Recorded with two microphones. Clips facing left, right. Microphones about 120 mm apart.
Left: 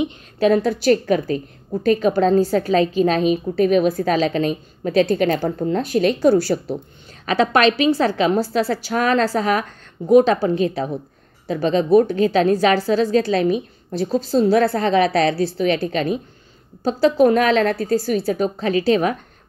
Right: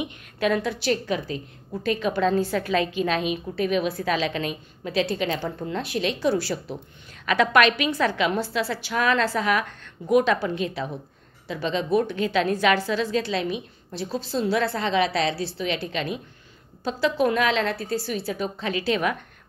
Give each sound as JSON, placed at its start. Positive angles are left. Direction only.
{"t": 0.0, "sound": "a woman's voice", "side_deg": 35}
{"t": 7.2, "sound": "a woman's voice", "side_deg": 30}